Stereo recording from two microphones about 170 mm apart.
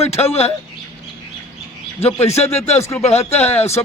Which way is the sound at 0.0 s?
40° left (ahead or behind).